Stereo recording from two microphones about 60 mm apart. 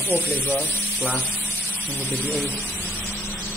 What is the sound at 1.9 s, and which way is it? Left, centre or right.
Speech, left.